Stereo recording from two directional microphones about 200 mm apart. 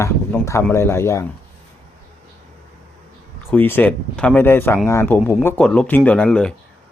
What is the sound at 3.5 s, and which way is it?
Speech, 10° left (ahead or behind).